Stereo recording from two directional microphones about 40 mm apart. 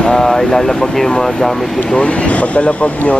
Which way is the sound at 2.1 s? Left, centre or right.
Left.